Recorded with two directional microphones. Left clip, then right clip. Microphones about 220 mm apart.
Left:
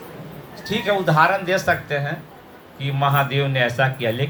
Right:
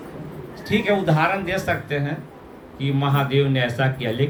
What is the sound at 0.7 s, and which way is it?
Speech, 20° right (ahead or behind).